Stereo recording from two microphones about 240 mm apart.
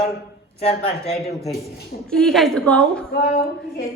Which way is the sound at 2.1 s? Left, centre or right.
Centre.